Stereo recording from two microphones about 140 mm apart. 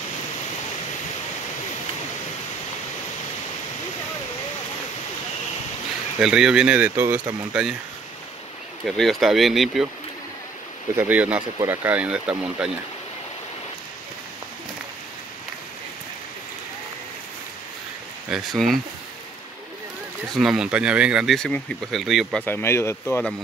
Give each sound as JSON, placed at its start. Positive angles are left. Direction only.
{"t": 6.2, "sound": "speech", "side_deg": -5}
{"t": 8.8, "sound": "speech", "side_deg": 0}
{"t": 11.0, "sound": "speech", "side_deg": -10}
{"t": 18.3, "sound": "speech", "side_deg": 0}
{"t": 20.3, "sound": "speech", "side_deg": -5}
{"t": 22.4, "sound": "speech", "side_deg": 15}